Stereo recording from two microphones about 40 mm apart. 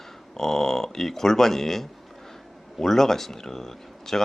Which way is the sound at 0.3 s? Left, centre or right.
Centre.